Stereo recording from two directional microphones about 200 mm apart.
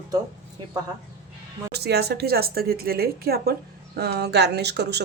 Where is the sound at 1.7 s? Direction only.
55° right (ahead or behind).